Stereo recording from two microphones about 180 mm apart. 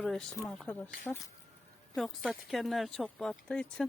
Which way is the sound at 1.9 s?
Centre (ahead or behind).